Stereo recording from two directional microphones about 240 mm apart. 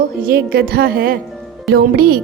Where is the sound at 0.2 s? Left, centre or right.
Right.